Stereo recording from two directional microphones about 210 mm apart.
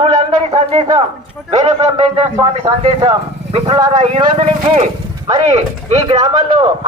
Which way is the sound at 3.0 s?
25° right (ahead or behind).